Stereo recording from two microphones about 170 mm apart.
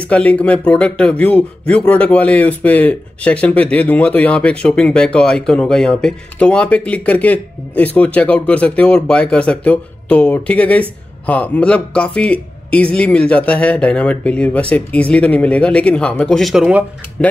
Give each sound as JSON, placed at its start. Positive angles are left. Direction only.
{"t": 0.1, "sound": "speech", "side_deg": 10}